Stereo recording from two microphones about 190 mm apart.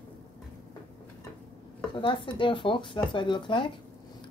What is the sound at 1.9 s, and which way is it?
Speech, 25° left (ahead or behind).